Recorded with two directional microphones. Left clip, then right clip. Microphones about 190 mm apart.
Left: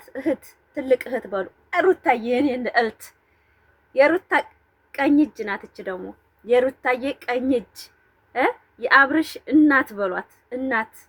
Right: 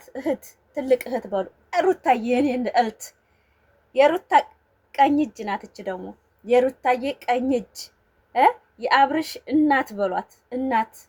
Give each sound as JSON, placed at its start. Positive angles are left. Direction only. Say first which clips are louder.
{"t": 0.0, "sound": "a woman's voice", "louder": "left 1 dB", "side_deg": -15}
{"t": 3.9, "sound": "a woman's voice", "louder": "right 1 dB", "side_deg": -15}